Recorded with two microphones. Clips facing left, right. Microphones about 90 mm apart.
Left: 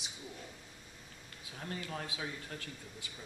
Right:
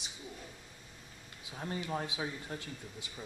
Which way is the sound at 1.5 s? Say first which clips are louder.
Right 5 dB; 20° right (ahead or behind).